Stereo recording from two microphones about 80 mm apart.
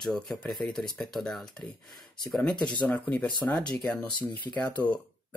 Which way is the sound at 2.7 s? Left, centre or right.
Centre.